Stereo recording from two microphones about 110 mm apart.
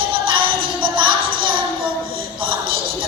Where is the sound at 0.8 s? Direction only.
50° right (ahead or behind).